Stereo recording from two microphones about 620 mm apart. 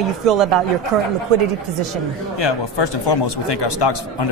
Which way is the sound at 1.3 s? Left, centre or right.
Right.